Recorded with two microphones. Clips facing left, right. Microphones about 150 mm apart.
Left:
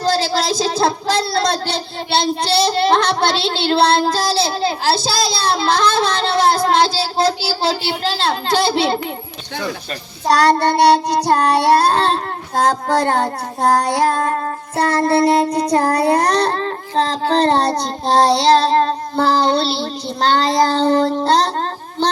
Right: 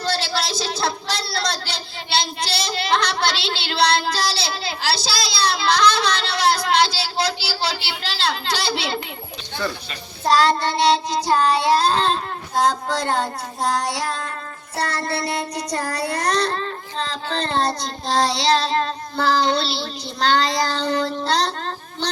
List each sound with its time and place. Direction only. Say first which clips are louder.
0.0 s speech: left 7 dB; 40° left (ahead or behind)
10.6 s child singing: left 6 dB; 60° left (ahead or behind); by 19.3 s 40° left (ahead or behind)
19.4 s speech: left 4 dB; 50° left (ahead or behind)